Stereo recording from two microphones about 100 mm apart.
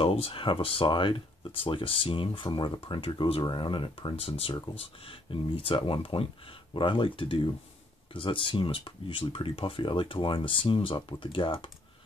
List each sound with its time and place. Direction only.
0.0 s speech: 70° left (ahead or behind)
4.7 s speech: 65° left (ahead or behind)